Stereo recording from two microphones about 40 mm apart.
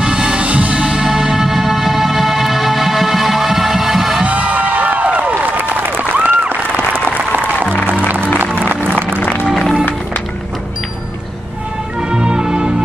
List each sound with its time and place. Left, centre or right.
0.0 s music: right
1.3 s music: centre
4.2 s music: right
5.4 s applause: right
6.1 s a sound: right
6.5 s applause: right
8.5 s music: right
12.0 s music: right